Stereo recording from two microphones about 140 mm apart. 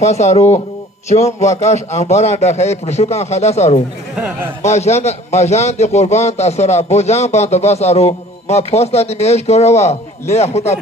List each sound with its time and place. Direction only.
0.0 s a man's voice: 50° left (ahead or behind)